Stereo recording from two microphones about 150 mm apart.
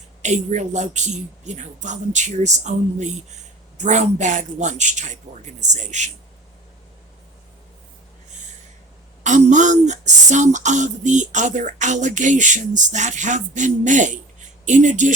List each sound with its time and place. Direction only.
0.2 s speech: 50° right (ahead or behind)
9.2 s speech: 55° right (ahead or behind)